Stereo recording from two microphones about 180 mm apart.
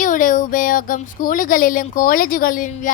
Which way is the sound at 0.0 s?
45° left (ahead or behind).